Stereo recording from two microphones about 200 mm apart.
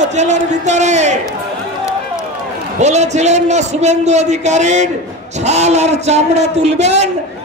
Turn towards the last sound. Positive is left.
turn(degrees=-35)  # may be behind; listen again after turning